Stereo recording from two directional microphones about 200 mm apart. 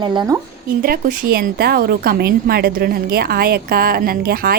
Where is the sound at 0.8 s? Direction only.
50° right (ahead or behind).